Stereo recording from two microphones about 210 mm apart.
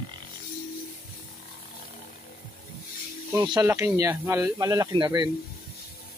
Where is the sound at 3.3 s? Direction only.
15° right (ahead or behind).